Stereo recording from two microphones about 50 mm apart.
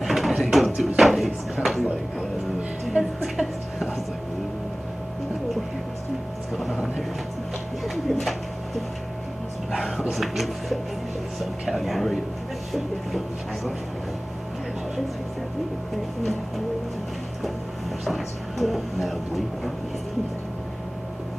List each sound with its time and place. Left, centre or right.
0.0 s music: centre
0.4 s a sound: centre
3.0 s music: centre
6.5 s vehicle: centre
7.8 s pigeon: centre
9.8 s a sound: centre
18.0 s music: centre